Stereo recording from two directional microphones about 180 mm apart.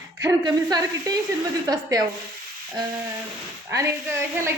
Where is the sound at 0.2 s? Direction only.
20° right (ahead or behind).